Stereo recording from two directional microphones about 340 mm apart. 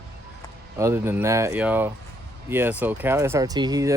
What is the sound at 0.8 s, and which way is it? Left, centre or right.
Speech, centre.